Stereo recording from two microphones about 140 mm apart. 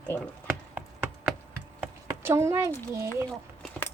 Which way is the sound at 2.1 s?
15° right (ahead or behind).